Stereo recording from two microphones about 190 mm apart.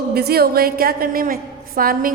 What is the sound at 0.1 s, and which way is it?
A woman's voice, 55° right (ahead or behind).